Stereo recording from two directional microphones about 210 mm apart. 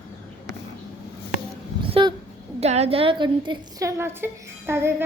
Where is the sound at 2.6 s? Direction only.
30° right (ahead or behind).